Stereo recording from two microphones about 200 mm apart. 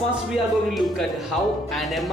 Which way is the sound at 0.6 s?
Centre (ahead or behind).